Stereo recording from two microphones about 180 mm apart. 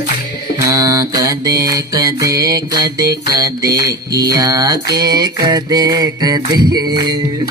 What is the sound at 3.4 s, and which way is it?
Mantra, 20° right (ahead or behind).